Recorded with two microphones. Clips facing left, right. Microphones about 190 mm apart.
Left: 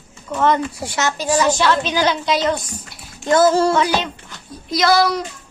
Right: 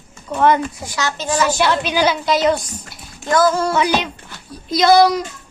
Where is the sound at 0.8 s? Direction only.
25° left (ahead or behind).